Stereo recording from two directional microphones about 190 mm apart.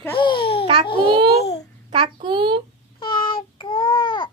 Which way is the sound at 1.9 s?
30° right (ahead or behind).